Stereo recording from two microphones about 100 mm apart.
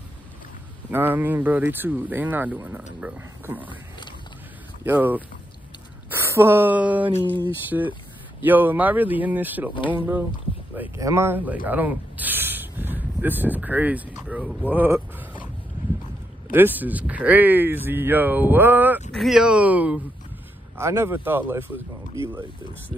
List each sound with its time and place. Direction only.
0.9 s speech: 20° right (ahead or behind)
4.8 s speech: 20° right (ahead or behind)
7.2 s a sound: 20° left (ahead or behind)
7.7 s speech: 15° right (ahead or behind)
11.0 s speech: 30° right (ahead or behind)
14.9 s mechanisms: 15° right (ahead or behind)
16.5 s speech: 20° right (ahead or behind)
19.1 s speech: 5° right (ahead or behind)
20.7 s speech: 25° right (ahead or behind)